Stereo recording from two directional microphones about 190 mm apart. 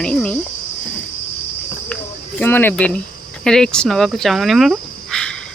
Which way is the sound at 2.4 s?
10° left (ahead or behind).